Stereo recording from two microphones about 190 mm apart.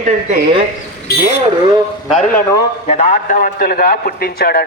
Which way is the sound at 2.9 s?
40° left (ahead or behind).